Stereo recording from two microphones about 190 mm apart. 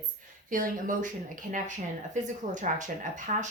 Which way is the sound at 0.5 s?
45° right (ahead or behind).